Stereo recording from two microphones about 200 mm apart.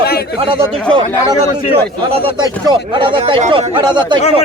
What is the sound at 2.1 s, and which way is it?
A man's voice, 25° right (ahead or behind).